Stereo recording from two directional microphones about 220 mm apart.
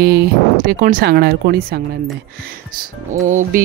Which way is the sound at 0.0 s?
45° right (ahead or behind).